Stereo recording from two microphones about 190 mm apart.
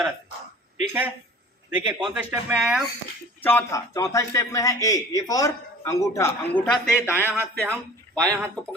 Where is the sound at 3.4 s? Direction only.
10° left (ahead or behind).